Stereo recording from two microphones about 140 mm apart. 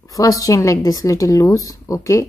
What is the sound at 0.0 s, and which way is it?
Speech, 25° left (ahead or behind).